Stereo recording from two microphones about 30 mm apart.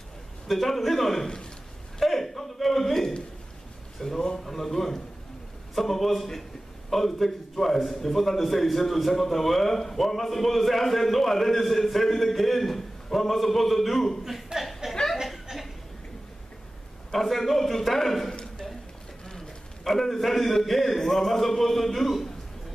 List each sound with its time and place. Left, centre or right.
0.5 s a man's voice: centre
14.2 s speech: centre
15.5 s chuckle: centre
17.1 s a man's voice: centre
19.8 s a man's voice: centre